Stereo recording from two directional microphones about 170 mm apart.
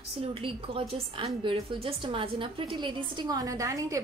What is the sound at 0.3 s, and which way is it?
A woman's voice, 30° right (ahead or behind).